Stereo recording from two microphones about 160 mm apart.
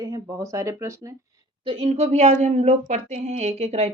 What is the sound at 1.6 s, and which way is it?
Speech, 40° right (ahead or behind).